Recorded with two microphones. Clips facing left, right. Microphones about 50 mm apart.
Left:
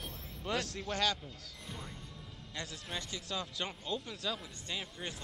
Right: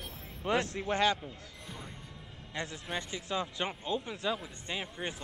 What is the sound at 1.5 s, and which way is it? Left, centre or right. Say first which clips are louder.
Speech: right 1 dB; centre.